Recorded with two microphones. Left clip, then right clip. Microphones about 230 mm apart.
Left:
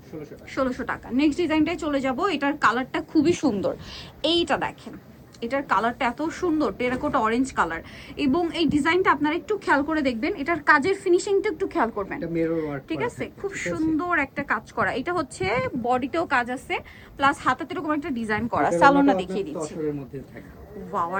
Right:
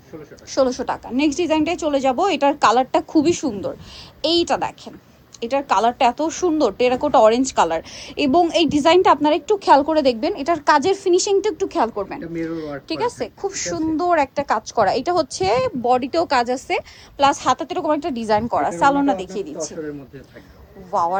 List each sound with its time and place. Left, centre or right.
0.5 s a woman's voice: centre
3.3 s speech: centre
4.2 s a woman's voice: centre
20.9 s a woman's voice: right